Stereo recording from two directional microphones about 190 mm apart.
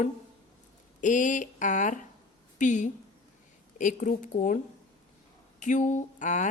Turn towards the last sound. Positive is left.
turn(degrees=40)  # may be behind; listen again after turning